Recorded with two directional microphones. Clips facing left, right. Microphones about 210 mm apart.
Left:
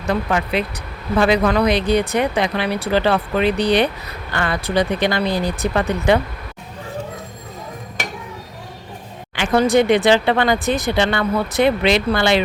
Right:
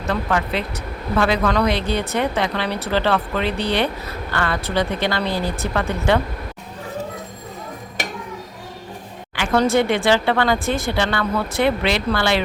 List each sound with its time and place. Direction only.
0.0 s speech: 15° left (ahead or behind)
9.3 s speech: 15° left (ahead or behind)